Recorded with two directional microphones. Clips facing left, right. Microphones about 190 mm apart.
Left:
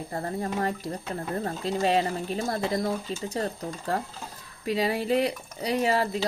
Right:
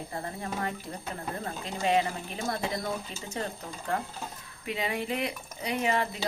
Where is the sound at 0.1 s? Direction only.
40° left (ahead or behind).